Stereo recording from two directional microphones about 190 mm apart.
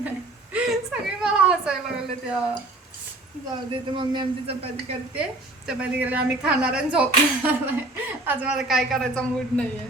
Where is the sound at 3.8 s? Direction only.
25° right (ahead or behind).